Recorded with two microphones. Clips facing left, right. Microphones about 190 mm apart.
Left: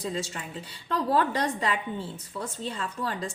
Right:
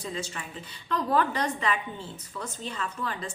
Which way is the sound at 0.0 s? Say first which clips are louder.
Left 3 dB; 35° left (ahead or behind).